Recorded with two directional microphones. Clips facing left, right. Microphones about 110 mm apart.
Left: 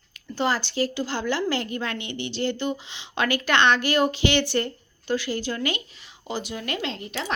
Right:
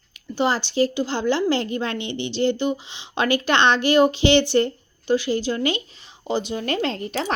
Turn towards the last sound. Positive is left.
turn(degrees=-40)  # may be behind; listen again after turning